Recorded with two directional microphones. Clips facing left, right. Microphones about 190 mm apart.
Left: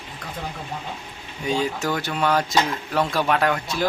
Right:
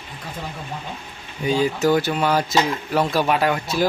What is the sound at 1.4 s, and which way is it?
A man's voice, 5° right (ahead or behind).